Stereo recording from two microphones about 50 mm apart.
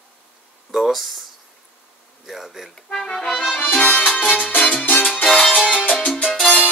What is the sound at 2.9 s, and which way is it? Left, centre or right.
Speech, centre.